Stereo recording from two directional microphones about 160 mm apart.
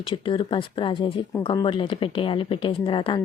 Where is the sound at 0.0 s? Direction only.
30° left (ahead or behind).